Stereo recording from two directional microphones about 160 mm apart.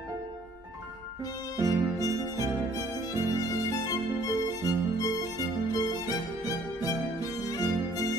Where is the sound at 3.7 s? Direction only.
20° left (ahead or behind).